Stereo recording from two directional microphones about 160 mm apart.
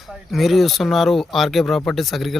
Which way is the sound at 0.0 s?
Centre (ahead or behind).